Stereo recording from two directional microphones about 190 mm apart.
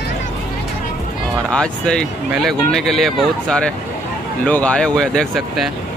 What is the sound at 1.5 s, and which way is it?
Speech, 5° left (ahead or behind).